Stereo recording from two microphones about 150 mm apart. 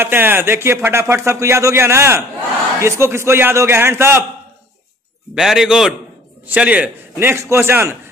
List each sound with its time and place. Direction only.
0.0 s speech: 15° right (ahead or behind)
5.3 s a man's voice: 5° right (ahead or behind)